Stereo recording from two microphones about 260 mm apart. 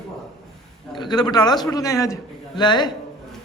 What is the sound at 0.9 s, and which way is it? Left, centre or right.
A man's voice, centre.